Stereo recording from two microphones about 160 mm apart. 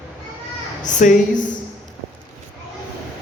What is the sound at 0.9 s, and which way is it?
Speech, 50° left (ahead or behind).